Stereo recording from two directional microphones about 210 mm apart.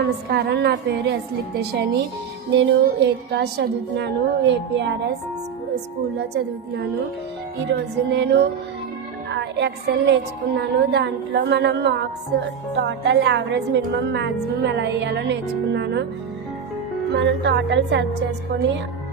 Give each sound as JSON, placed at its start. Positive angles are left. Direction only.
{"t": 0.0, "sound": "a woman's voice", "side_deg": -50}
{"t": 6.1, "sound": "a woman's voice", "side_deg": -50}
{"t": 17.1, "sound": "a woman's voice", "side_deg": -50}